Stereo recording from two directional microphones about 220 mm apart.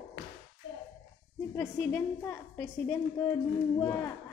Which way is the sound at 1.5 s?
10° left (ahead or behind).